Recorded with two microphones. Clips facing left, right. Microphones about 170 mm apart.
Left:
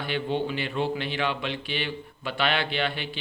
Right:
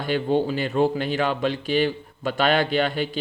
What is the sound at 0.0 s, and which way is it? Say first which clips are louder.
Speech: right 6 dB; 45° right (ahead or behind).